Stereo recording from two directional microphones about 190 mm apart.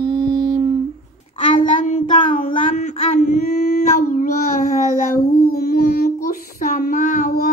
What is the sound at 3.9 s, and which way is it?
Child singing, 45° left (ahead or behind).